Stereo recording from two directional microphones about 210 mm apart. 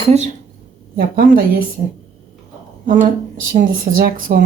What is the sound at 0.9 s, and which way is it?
Speech, 45° right (ahead or behind).